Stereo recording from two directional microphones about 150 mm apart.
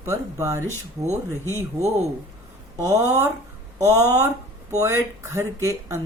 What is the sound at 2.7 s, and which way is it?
Speech, 20° right (ahead or behind).